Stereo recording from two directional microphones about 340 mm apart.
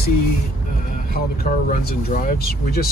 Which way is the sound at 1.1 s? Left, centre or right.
Left.